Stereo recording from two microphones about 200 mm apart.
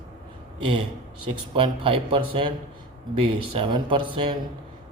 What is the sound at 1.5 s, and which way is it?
A man's voice, 25° right (ahead or behind).